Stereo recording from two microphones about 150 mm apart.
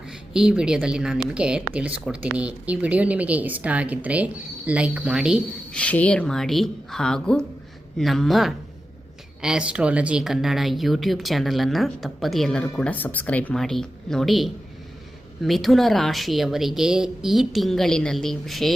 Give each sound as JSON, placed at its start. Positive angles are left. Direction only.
{"t": 0.1, "sound": "a woman's voice", "side_deg": -5}
{"t": 5.7, "sound": "speech", "side_deg": 10}